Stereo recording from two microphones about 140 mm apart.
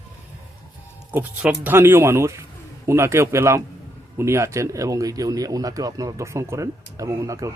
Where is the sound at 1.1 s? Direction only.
10° right (ahead or behind).